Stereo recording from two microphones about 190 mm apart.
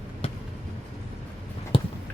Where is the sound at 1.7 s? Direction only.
30° left (ahead or behind).